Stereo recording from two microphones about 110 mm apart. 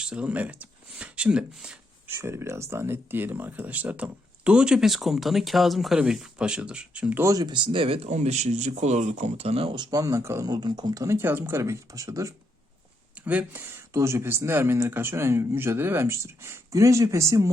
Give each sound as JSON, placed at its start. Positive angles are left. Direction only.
{"t": 0.0, "sound": "speech", "side_deg": -10}
{"t": 2.0, "sound": "speech", "side_deg": -20}
{"t": 7.2, "sound": "speech", "side_deg": -30}
{"t": 10.5, "sound": "speech", "side_deg": -40}
{"t": 13.2, "sound": "speech", "side_deg": -15}